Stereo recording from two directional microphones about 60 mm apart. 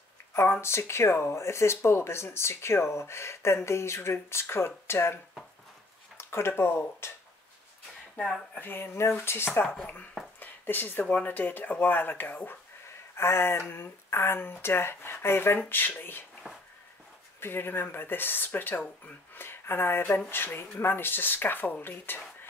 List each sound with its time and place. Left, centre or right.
0.3 s speech: left
8.5 s speech: left
10.4 s a sound: left
11.2 s speech: left
13.1 s speech: left
17.4 s speech: left